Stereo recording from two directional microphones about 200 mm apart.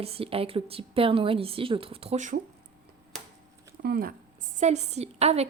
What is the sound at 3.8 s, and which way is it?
Speech, 50° right (ahead or behind).